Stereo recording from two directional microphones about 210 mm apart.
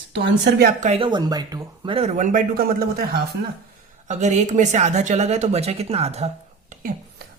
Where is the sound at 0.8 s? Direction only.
30° right (ahead or behind); by 3.2 s 45° right (ahead or behind).